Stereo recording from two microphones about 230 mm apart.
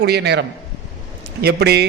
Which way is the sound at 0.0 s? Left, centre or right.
Right.